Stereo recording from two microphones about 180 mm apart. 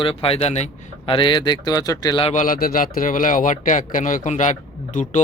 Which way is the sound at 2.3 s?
50° left (ahead or behind).